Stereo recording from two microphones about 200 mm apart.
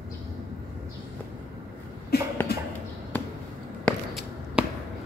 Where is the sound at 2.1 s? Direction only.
55° left (ahead or behind).